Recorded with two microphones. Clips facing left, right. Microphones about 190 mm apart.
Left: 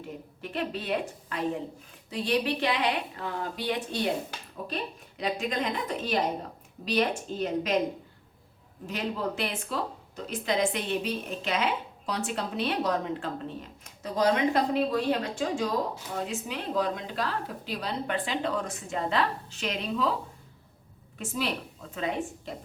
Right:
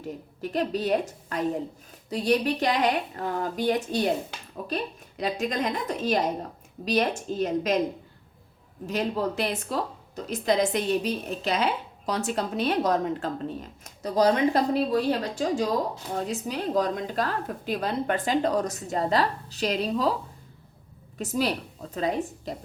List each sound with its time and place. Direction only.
0.4 s a woman's voice: 40° right (ahead or behind)
5.2 s a woman's voice: 40° right (ahead or behind)
8.9 s a woman's voice: 40° right (ahead or behind)
21.2 s a woman's voice: 40° right (ahead or behind)